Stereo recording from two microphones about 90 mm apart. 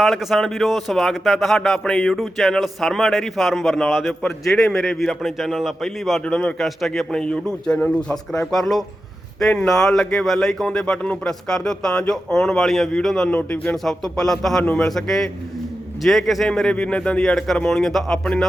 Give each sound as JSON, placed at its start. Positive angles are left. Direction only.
{"t": 0.0, "sound": "a man's voice", "side_deg": 0}
{"t": 6.2, "sound": "speech", "side_deg": 10}
{"t": 6.6, "sound": "a man's voice", "side_deg": 0}
{"t": 13.3, "sound": "speech", "side_deg": 15}
{"t": 13.8, "sound": "a man's voice", "side_deg": 5}